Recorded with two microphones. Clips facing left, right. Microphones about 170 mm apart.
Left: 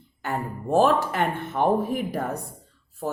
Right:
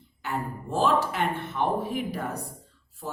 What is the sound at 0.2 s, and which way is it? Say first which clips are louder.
Speech: left 2 dB; 50° left (ahead or behind).